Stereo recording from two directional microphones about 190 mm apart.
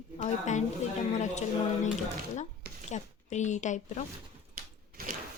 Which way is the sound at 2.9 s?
40° left (ahead or behind).